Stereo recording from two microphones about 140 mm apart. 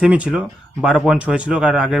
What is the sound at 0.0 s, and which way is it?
Speech, 5° right (ahead or behind).